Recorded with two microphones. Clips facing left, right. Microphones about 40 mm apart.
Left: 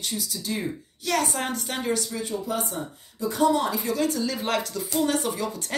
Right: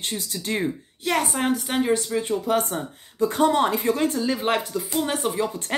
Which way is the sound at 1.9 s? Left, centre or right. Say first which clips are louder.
Right 5 dB; right.